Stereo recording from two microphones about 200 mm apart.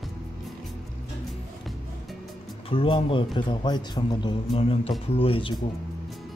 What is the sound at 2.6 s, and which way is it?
Speech, 25° left (ahead or behind).